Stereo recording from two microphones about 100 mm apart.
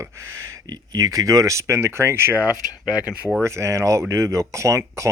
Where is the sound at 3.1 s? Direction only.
5° right (ahead or behind).